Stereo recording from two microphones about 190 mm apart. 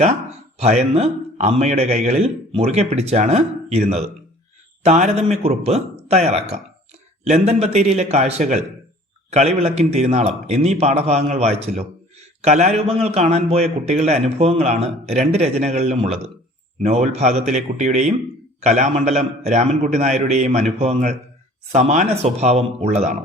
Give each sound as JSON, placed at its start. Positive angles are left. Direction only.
{"t": 0.6, "sound": "a man's voice", "side_deg": -35}